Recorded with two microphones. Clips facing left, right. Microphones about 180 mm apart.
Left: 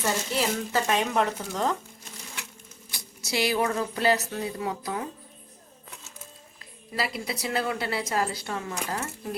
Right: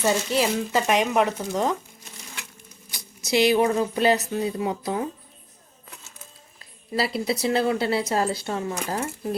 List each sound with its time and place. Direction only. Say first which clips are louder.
0.0 s speech: right 5 dB; 15° right (ahead or behind)
2.9 s speech: right 7 dB; 20° right (ahead or behind)
6.9 s speech: right 6 dB; 30° right (ahead or behind)